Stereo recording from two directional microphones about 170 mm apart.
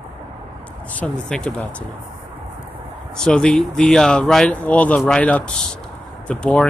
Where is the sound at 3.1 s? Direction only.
5° left (ahead or behind).